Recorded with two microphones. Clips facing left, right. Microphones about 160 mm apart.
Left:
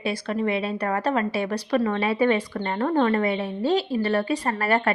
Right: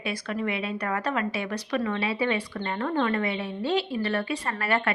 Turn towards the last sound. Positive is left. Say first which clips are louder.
# left 4 dB
turn(degrees=40)  # may be behind; listen again after turning